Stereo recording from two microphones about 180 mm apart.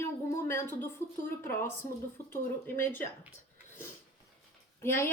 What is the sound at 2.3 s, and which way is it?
Speech, 10° left (ahead or behind).